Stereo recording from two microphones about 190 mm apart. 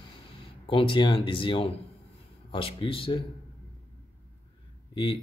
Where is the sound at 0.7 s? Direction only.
25° left (ahead or behind).